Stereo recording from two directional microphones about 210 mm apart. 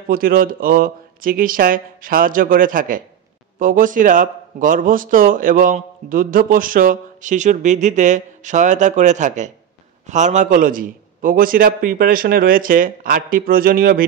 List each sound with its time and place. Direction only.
0.1 s speech: 45° right (ahead or behind)